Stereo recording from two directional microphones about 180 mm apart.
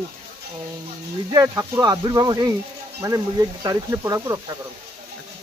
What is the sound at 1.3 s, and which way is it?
Speech, 20° right (ahead or behind).